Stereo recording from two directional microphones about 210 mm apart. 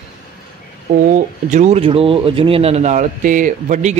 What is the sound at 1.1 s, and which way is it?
A man's voice, 35° right (ahead or behind).